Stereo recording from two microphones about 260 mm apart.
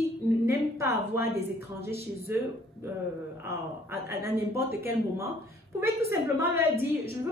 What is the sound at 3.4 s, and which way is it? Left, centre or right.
A woman's voice, centre.